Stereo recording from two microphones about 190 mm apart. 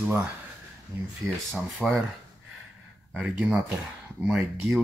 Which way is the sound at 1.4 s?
Centre (ahead or behind).